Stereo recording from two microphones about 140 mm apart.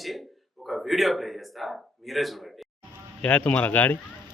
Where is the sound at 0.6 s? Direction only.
Centre (ahead or behind).